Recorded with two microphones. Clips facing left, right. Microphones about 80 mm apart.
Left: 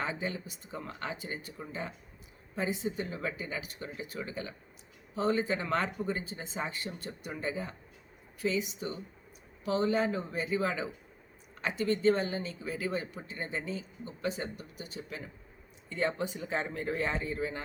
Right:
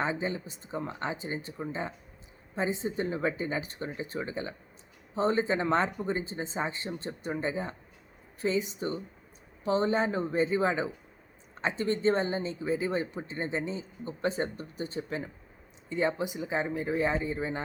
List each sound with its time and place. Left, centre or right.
0.0 s speech: right
15.9 s speech: centre